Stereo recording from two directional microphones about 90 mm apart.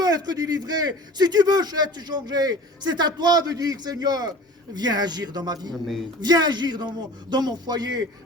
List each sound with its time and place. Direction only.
0.0 s a man's voice: 50° right (ahead or behind)
5.7 s a man's voice: centre (ahead or behind)
6.2 s a man's voice: 50° right (ahead or behind)